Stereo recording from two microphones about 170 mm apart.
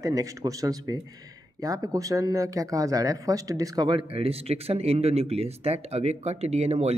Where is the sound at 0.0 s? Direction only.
20° right (ahead or behind).